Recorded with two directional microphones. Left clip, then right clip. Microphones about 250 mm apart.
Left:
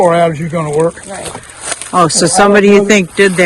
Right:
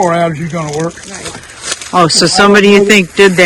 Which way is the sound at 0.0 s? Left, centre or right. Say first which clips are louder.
Left 2 dB; left.